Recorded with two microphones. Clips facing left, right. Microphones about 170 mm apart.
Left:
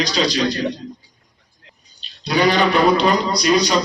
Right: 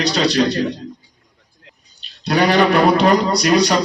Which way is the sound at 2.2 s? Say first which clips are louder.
Right 2 dB; 65° right (ahead or behind).